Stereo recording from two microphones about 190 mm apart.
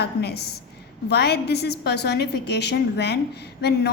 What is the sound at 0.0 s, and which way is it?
A woman's voice, 60° left (ahead or behind).